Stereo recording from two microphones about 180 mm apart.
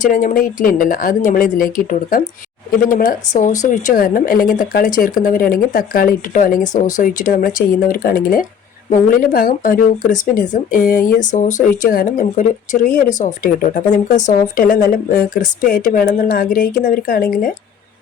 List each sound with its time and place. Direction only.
0.0 s speech: 45° left (ahead or behind)